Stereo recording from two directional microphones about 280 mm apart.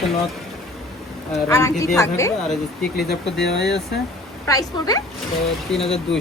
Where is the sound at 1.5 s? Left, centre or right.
Centre.